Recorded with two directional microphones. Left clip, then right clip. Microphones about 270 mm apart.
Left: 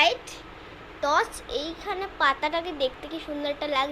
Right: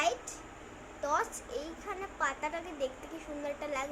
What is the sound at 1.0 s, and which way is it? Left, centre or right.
A woman's voice, centre.